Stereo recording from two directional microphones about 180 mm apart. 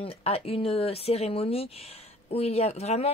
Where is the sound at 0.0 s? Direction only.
35° left (ahead or behind).